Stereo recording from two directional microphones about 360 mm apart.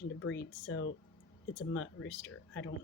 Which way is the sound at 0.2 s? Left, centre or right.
Left.